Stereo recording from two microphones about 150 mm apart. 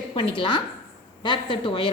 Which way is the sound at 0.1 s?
35° left (ahead or behind).